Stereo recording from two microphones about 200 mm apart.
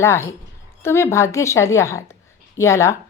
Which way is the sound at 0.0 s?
15° left (ahead or behind).